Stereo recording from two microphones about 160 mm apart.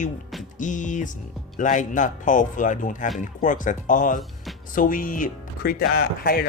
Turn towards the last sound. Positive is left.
turn(degrees=70)  # may be behind; listen again after turning